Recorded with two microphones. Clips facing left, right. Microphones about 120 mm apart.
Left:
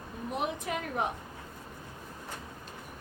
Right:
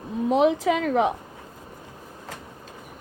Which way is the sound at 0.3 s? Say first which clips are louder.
Right 14 dB; 90° right.